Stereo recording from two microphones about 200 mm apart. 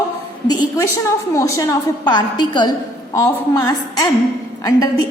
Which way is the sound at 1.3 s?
15° left (ahead or behind).